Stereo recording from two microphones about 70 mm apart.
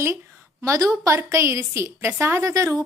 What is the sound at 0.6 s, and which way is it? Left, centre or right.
Speech, right.